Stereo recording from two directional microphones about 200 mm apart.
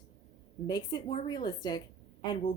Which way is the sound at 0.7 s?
20° left (ahead or behind).